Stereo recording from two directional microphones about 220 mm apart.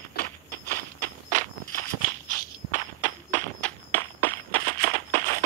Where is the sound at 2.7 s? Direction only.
35° right (ahead or behind).